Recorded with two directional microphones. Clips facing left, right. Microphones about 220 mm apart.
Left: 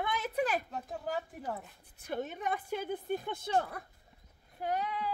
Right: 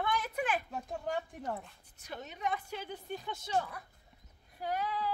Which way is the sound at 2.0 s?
50° left (ahead or behind).